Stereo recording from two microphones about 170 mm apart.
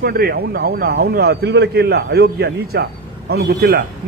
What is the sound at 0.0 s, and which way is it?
A man's voice, 65° right (ahead or behind).